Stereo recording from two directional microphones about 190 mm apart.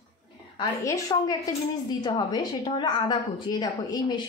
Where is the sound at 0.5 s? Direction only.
20° left (ahead or behind).